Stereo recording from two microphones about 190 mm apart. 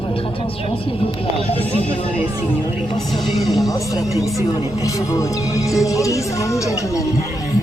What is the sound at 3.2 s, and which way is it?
Speech, centre (ahead or behind).